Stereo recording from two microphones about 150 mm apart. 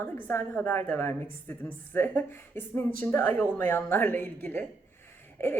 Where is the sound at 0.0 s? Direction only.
15° left (ahead or behind).